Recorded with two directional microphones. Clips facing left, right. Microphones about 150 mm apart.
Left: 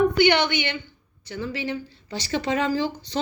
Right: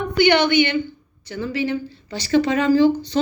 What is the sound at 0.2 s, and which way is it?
Speech, 25° left (ahead or behind).